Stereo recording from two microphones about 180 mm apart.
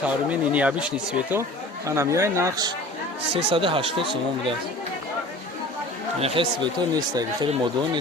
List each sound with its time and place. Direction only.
0.0 s speech: 5° right (ahead or behind)
3.3 s speech: 30° right (ahead or behind)
6.1 s speech: 30° right (ahead or behind)